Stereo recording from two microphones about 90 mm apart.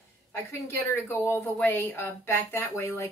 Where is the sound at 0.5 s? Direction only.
25° left (ahead or behind).